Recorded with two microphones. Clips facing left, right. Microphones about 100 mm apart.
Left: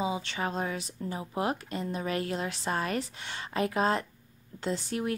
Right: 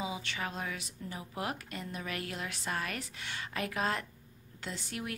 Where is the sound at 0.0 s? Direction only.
30° left (ahead or behind).